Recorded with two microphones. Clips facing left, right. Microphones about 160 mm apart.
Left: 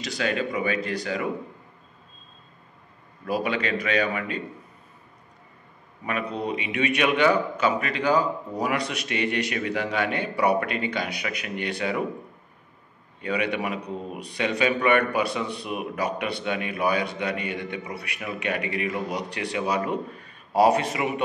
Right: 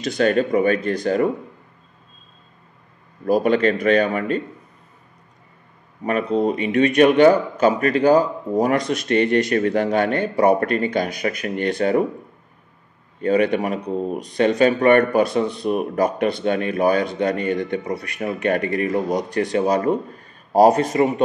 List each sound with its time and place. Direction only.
0.0 s speech: 50° right (ahead or behind)
3.3 s speech: 45° right (ahead or behind)
6.0 s speech: 45° right (ahead or behind)
13.2 s speech: 45° right (ahead or behind)